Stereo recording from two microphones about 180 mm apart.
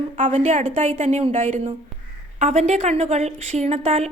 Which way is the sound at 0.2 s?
45° right (ahead or behind).